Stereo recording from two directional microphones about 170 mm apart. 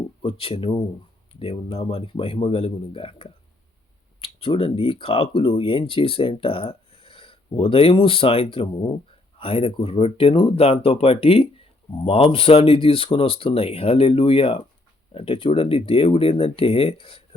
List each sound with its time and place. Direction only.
0.2 s speech: 35° left (ahead or behind)